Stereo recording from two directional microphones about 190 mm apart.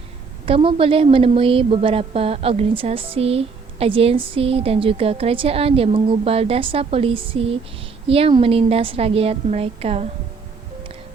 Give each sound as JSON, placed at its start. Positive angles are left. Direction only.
{"t": 0.4, "sound": "a woman's voice", "side_deg": -30}